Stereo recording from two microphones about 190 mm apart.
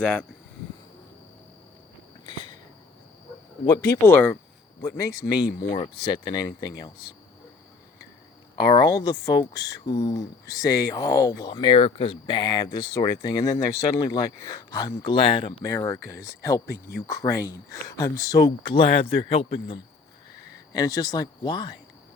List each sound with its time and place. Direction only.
0.0 s speech: 5° left (ahead or behind)
2.2 s a sound: 25° left (ahead or behind)
3.7 s speech: 20° left (ahead or behind)
8.5 s speech: 20° left (ahead or behind)